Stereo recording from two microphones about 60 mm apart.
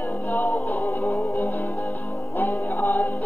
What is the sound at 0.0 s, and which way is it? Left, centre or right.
Music, left.